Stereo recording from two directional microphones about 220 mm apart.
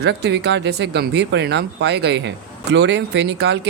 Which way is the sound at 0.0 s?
50° right (ahead or behind).